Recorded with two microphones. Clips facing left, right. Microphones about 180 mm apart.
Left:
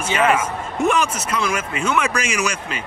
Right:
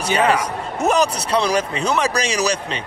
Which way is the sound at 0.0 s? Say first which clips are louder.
Right 1 dB; 35° right (ahead or behind).